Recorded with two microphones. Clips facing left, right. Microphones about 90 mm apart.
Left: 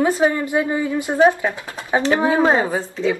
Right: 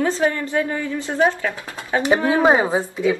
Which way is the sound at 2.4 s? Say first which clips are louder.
Right 1 dB; 15° right (ahead or behind).